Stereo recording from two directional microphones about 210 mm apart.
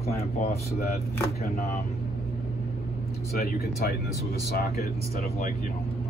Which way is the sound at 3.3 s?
50° left (ahead or behind).